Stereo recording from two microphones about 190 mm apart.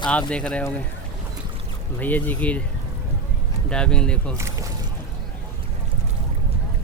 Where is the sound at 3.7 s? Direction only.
5° left (ahead or behind).